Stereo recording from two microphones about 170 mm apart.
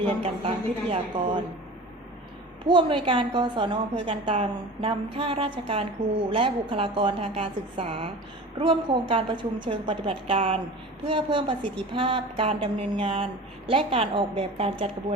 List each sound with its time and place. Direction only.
0.2 s a woman's voice: 35° right (ahead or behind)
2.6 s a woman's voice: 30° right (ahead or behind)